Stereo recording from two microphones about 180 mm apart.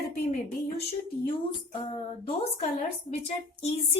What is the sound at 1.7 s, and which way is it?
Speech, 35° left (ahead or behind).